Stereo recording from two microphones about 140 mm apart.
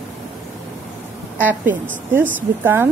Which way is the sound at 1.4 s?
10° right (ahead or behind).